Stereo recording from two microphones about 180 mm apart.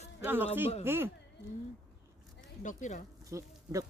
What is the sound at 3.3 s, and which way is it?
Speech, 20° right (ahead or behind).